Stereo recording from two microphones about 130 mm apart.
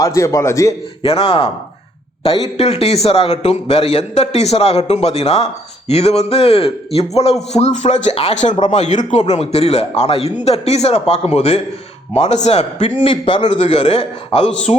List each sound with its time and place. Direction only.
0.0 s a man's voice: 25° left (ahead or behind)
1.0 s a man's voice: 45° left (ahead or behind)
2.6 s a man's voice: 50° left (ahead or behind)
7.5 s a sound: 60° left (ahead or behind)
8.1 s a man's voice: 50° left (ahead or behind)
8.6 s a sound: 60° left (ahead or behind)
9.1 s a man's voice: 60° left (ahead or behind)